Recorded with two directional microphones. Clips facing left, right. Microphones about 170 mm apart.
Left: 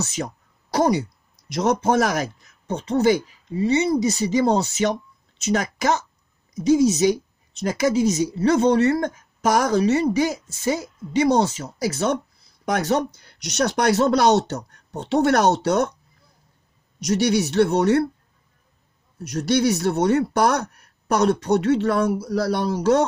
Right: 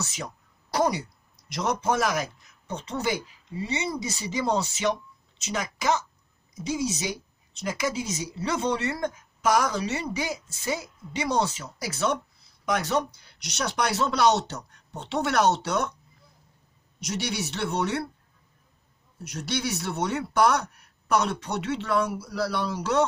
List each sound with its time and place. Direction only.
1.5 s speech: 45° left (ahead or behind)
5.5 s speech: 45° left (ahead or behind)
17.0 s speech: 40° left (ahead or behind)
19.2 s speech: 40° left (ahead or behind)